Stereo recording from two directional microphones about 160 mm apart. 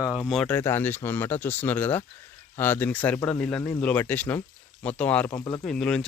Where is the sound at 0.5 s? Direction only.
15° left (ahead or behind).